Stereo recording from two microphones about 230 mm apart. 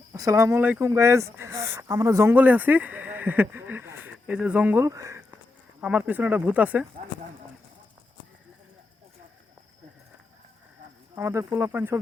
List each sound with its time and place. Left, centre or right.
0.1 s speech: centre
11.1 s speech: centre